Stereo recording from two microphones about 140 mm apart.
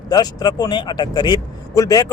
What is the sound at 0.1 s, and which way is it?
Speech, 30° left (ahead or behind).